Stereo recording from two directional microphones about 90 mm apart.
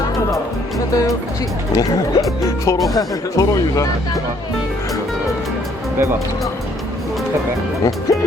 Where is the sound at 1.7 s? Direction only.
40° left (ahead or behind).